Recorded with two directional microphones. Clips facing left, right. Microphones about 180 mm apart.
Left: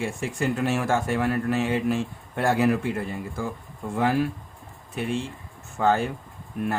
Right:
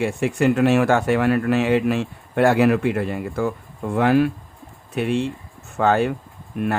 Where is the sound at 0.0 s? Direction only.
65° right (ahead or behind).